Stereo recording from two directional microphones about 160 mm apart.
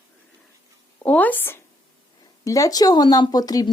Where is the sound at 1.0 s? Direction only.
10° left (ahead or behind).